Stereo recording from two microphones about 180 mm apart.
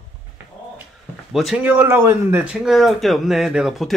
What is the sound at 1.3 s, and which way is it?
Speech, centre (ahead or behind).